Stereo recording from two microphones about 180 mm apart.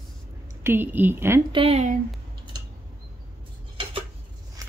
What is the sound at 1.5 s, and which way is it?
Speech, 35° right (ahead or behind).